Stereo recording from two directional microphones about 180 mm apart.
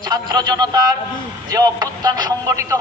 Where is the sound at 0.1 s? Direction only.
20° right (ahead or behind).